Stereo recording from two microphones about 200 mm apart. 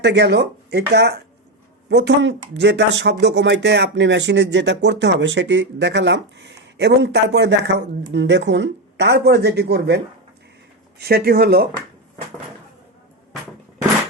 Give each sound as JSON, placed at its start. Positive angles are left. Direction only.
{"t": 0.0, "sound": "speech", "side_deg": -60}